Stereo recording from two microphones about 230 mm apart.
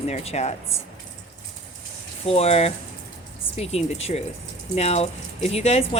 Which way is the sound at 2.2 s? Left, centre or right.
Left.